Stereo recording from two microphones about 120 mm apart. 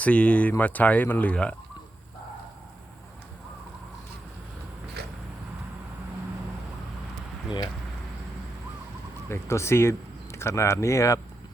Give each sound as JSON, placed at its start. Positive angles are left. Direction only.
{"t": 0.0, "sound": "speech", "side_deg": 10}
{"t": 9.3, "sound": "speech", "side_deg": 20}